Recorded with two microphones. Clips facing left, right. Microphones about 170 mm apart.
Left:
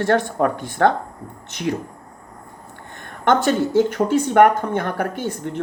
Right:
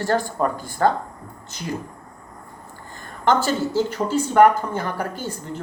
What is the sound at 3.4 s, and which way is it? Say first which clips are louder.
Speech: left 5 dB; 60° left (ahead or behind).